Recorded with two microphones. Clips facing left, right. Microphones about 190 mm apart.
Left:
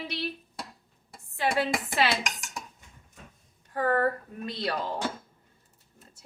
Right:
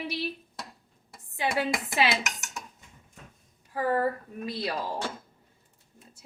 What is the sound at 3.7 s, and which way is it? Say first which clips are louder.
A woman's voice: left 1 dB; 5° right (ahead or behind).